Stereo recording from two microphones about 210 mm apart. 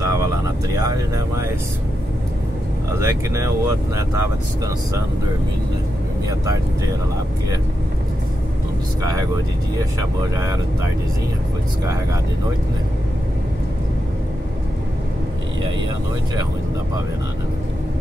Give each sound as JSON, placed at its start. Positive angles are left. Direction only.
{"t": 0.7, "sound": "speech", "side_deg": -15}
{"t": 3.0, "sound": "speech", "side_deg": -15}
{"t": 9.9, "sound": "speech", "side_deg": -15}